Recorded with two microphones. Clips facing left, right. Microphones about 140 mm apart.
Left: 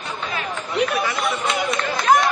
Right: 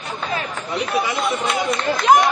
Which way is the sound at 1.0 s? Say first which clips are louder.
Right 2 dB; 20° right (ahead or behind).